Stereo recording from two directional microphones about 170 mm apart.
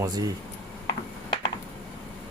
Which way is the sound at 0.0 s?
20° right (ahead or behind).